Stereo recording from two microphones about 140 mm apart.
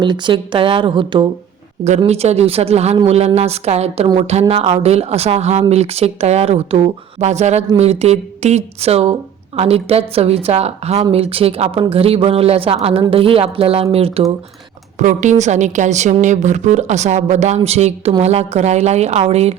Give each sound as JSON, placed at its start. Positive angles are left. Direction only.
{"t": 0.0, "sound": "a woman's voice", "side_deg": -35}
{"t": 2.0, "sound": "a woman's voice", "side_deg": -50}
{"t": 14.9, "sound": "a woman's voice", "side_deg": -60}